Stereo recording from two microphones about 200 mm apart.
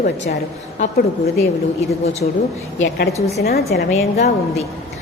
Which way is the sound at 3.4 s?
50° left (ahead or behind).